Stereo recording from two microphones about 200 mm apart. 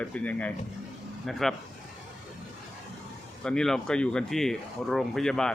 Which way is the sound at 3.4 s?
5° left (ahead or behind).